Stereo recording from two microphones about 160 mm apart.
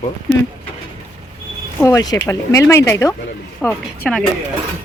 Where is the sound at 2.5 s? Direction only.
15° left (ahead or behind).